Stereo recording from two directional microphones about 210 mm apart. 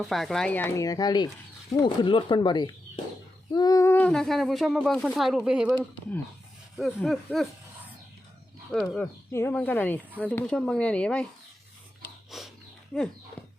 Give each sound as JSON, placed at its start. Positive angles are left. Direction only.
{"t": 0.0, "sound": "speech", "side_deg": 0}
{"t": 6.9, "sound": "speech", "side_deg": 5}
{"t": 8.7, "sound": "speech", "side_deg": 5}
{"t": 12.3, "sound": "dog", "side_deg": 0}
{"t": 12.9, "sound": "speech", "side_deg": 0}
{"t": 13.4, "sound": "clip-clop", "side_deg": 10}